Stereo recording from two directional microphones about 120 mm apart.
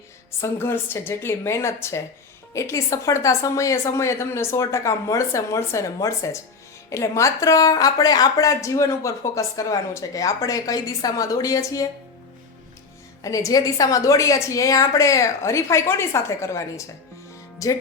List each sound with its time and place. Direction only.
0.3 s a woman's voice: 20° left (ahead or behind)
13.2 s a woman's voice: 30° left (ahead or behind)